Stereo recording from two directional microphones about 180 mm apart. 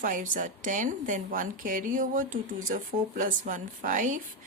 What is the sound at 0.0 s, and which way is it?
A woman's voice, 45° right (ahead or behind).